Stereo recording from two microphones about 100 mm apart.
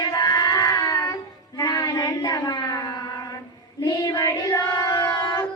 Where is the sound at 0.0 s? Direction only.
35° left (ahead or behind).